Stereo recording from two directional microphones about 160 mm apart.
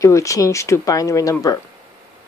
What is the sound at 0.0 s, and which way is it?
Speech, 20° left (ahead or behind).